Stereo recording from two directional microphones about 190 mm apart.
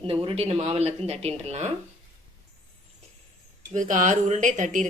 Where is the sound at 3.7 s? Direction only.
40° right (ahead or behind).